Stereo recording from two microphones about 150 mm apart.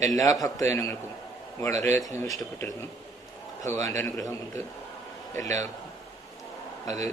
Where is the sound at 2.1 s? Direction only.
20° left (ahead or behind).